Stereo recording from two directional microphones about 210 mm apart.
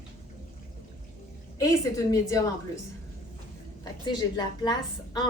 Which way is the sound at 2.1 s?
15° left (ahead or behind).